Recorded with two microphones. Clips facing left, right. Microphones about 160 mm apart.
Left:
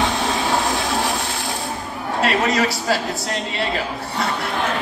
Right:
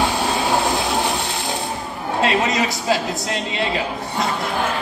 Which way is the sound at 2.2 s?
20° right (ahead or behind).